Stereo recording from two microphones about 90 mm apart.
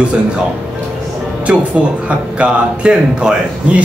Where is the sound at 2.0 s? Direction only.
15° right (ahead or behind).